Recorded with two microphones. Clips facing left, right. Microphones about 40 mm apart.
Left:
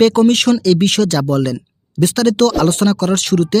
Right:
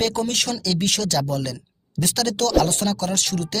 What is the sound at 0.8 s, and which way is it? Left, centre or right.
Speech, left.